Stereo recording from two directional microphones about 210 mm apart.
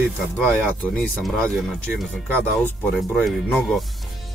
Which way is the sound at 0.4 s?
5° left (ahead or behind).